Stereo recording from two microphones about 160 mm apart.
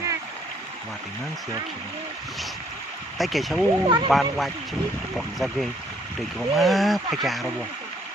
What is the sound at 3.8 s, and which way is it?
Speech, 30° right (ahead or behind).